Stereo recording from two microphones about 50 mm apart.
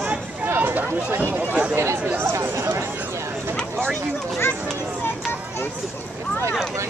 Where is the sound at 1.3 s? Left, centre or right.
Right.